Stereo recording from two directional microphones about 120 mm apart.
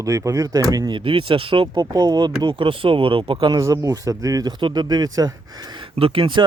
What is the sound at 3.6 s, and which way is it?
Speech, 30° right (ahead or behind).